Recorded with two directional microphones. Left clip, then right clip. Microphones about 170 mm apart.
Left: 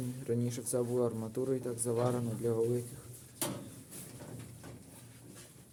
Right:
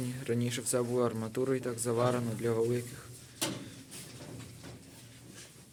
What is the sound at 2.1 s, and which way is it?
Speech, 5° right (ahead or behind).